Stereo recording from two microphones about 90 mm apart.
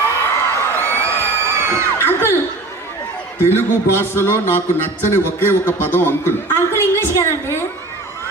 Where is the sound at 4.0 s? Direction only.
25° left (ahead or behind).